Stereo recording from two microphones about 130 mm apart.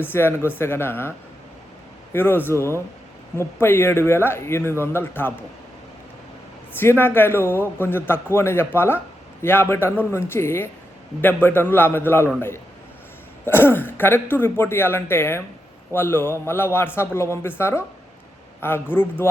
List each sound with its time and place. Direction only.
0.0 s speech: 15° left (ahead or behind)
2.1 s a man's voice: 15° left (ahead or behind)
6.7 s speech: 15° left (ahead or behind)
13.4 s a man's voice: 15° left (ahead or behind)